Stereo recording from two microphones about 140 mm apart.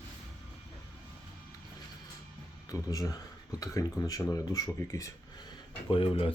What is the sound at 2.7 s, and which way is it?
Speech, 25° left (ahead or behind).